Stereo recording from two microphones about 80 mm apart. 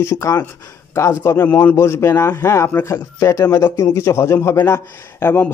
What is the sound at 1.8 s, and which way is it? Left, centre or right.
A man's voice, left.